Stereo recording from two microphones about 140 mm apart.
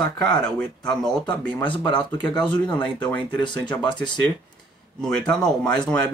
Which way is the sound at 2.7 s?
10° left (ahead or behind).